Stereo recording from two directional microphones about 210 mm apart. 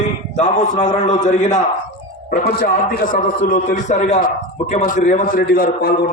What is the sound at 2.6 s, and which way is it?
A man's voice, 45° left (ahead or behind).